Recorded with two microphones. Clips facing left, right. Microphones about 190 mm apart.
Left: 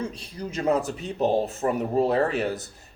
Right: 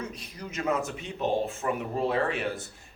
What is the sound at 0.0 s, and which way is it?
A man's voice, 30° left (ahead or behind).